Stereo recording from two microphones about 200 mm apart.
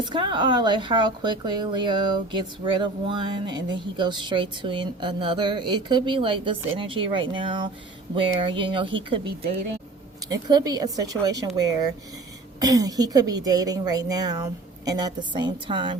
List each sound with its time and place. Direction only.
0.0 s speech: 25° right (ahead or behind)